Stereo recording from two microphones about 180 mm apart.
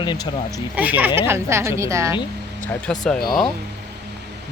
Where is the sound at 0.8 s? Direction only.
10° right (ahead or behind).